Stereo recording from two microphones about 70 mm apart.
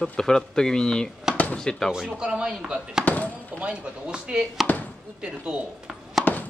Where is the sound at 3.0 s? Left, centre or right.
Left.